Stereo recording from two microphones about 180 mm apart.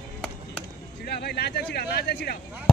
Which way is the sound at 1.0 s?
65° left (ahead or behind).